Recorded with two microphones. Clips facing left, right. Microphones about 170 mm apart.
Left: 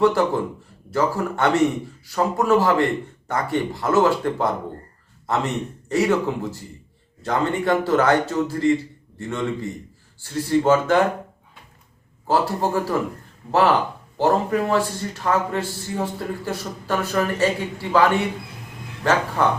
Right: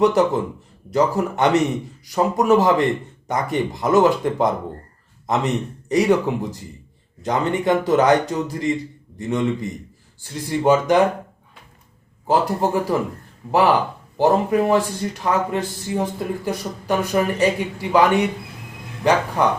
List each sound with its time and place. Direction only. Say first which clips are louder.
0.0 s a man's voice: right 2 dB; 20° right (ahead or behind)
12.3 s speech: right 2 dB; 15° right (ahead or behind)